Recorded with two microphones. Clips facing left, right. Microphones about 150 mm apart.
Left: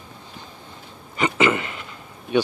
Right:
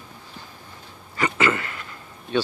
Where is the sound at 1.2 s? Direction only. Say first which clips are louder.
Left 3 dB; 20° left (ahead or behind).